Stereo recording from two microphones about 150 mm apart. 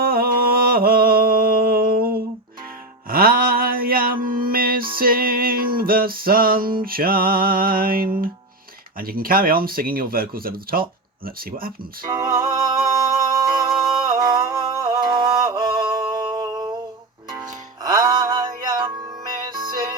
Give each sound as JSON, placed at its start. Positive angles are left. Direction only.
{"t": 0.0, "sound": "a sound", "side_deg": -80}
{"t": 3.1, "sound": "mantra", "side_deg": -80}
{"t": 4.9, "sound": "music", "side_deg": -75}
{"t": 6.8, "sound": "speech", "side_deg": -75}
{"t": 12.0, "sound": "music", "side_deg": -25}
{"t": 13.7, "sound": "yodeling", "side_deg": 0}
{"t": 14.3, "sound": "music", "side_deg": -25}
{"t": 15.7, "sound": "music", "side_deg": -35}
{"t": 16.4, "sound": "a sound", "side_deg": -25}
{"t": 17.3, "sound": "music", "side_deg": -25}